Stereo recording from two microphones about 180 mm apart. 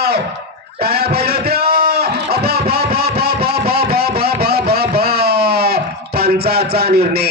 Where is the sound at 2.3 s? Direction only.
60° right (ahead or behind).